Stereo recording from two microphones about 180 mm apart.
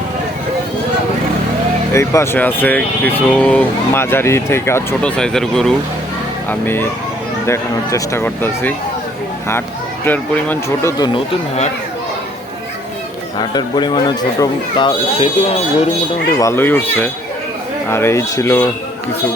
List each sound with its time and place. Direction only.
1.9 s speech: 15° left (ahead or behind)
10.1 s speech: 10° left (ahead or behind)
10.9 s speech: 25° left (ahead or behind)
13.4 s speech: 25° left (ahead or behind)
16.4 s speech: 15° left (ahead or behind)